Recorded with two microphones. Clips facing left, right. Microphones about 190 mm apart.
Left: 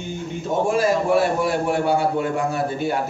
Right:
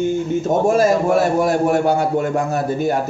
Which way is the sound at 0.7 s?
45° right (ahead or behind).